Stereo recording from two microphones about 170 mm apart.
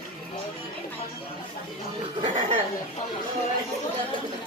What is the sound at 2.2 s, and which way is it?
Speech, 35° right (ahead or behind).